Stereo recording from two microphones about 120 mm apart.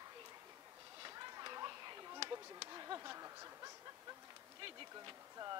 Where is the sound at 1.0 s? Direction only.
35° right (ahead or behind).